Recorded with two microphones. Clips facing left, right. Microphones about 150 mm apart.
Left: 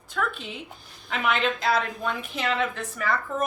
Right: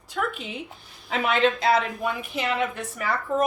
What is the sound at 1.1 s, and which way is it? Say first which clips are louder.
Speech: right 3 dB; 30° right (ahead or behind).